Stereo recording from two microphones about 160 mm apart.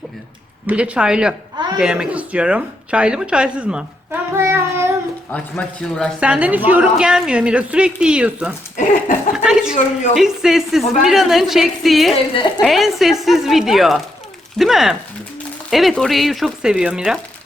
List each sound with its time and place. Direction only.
0.7 s speech: 5° right (ahead or behind)
5.3 s speech: 5° left (ahead or behind)
6.1 s speech: 5° right (ahead or behind)
8.7 s a sound: 60° left (ahead or behind)
9.3 s a woman's voice: 5° right (ahead or behind)
12.3 s a woman's voice: 30° left (ahead or behind)
12.6 s a woman's voice: centre (ahead or behind)